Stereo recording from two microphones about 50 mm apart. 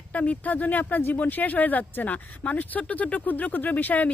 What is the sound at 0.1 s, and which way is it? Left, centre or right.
Speech, left.